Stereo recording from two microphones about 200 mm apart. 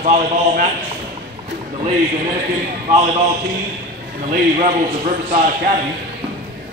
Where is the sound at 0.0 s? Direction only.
40° right (ahead or behind).